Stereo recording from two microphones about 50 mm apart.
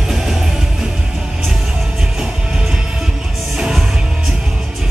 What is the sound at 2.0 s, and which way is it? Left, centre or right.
Music, centre.